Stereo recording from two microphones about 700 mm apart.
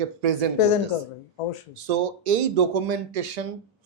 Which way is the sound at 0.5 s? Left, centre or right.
Left.